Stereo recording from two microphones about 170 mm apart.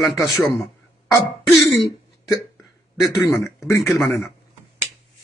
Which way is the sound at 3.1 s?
15° left (ahead or behind).